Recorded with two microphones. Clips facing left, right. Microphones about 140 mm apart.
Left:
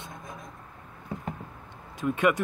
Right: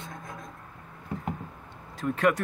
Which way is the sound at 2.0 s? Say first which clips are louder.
Even; centre (ahead or behind).